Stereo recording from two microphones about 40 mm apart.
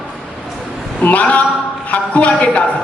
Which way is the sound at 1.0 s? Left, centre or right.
Left.